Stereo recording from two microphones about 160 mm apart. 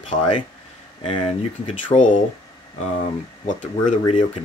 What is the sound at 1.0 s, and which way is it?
Speech, 40° left (ahead or behind).